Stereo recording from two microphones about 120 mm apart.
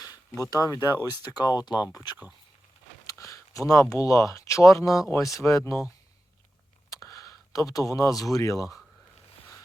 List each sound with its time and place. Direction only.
0.3 s speech: 20° left (ahead or behind)
0.5 s speech: 30° left (ahead or behind)
6.9 s speech: 25° left (ahead or behind)